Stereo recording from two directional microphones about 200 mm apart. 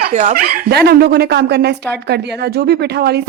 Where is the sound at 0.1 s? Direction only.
35° right (ahead or behind).